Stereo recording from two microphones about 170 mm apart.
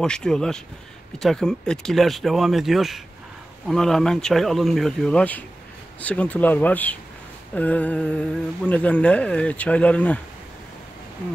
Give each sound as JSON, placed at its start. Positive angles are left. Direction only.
{"t": 0.0, "sound": "speech", "side_deg": 5}